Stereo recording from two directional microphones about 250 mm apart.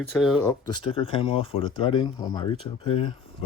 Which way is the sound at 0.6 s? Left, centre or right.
Centre.